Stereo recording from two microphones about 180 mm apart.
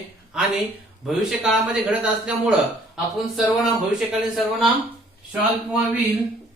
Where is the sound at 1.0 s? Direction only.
Centre (ahead or behind).